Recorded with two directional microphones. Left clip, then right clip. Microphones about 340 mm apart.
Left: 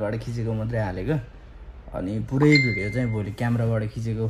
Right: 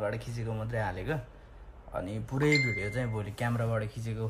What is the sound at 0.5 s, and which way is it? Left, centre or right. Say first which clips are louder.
Speech: left 5 dB; left.